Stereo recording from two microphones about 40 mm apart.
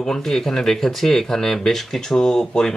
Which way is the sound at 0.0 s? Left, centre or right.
Centre.